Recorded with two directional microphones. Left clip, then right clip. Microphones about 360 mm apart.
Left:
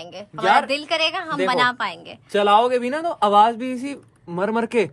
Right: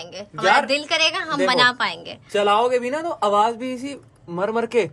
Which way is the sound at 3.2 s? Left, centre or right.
Left.